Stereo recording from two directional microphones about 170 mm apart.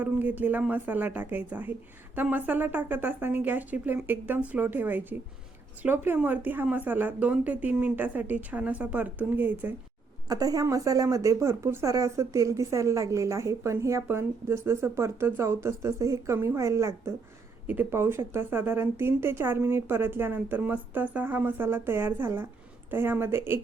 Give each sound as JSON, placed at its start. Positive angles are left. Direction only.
{"t": 0.0, "sound": "speech", "side_deg": -10}